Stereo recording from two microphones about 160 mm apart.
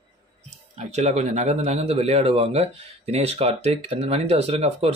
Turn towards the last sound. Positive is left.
turn(degrees=-40)  # may be behind; listen again after turning